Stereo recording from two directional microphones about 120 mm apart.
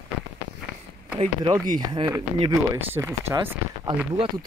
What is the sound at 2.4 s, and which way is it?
Speech, 25° right (ahead or behind).